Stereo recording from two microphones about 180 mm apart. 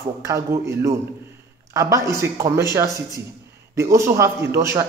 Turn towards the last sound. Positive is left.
turn(degrees=-15)  # may be behind; listen again after turning